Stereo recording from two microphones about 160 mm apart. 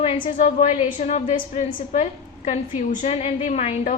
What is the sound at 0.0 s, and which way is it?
Speech, 35° left (ahead or behind).